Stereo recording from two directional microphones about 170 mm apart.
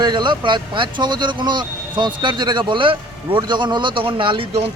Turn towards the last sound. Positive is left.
turn(degrees=-30)  # may be behind; listen again after turning